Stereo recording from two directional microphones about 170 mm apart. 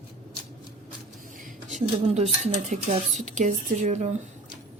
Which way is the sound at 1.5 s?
45° right (ahead or behind).